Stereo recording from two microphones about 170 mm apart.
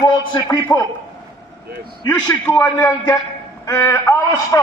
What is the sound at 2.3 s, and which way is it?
A man's voice, 15° left (ahead or behind).